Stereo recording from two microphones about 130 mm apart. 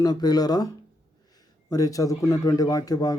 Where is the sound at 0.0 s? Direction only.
30° left (ahead or behind).